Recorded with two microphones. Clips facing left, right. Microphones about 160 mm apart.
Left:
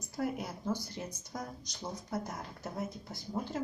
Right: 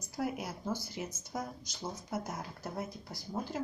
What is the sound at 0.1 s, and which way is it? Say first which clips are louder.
A woman's voice: left 1 dB; 5° right (ahead or behind).